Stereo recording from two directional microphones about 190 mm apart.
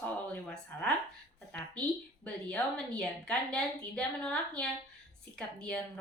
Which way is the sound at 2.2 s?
5° left (ahead or behind).